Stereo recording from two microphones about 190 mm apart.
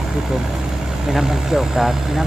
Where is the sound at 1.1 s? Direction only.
Centre (ahead or behind).